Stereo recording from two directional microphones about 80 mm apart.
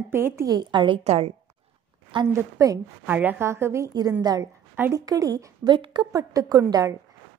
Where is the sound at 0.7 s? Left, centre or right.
Right.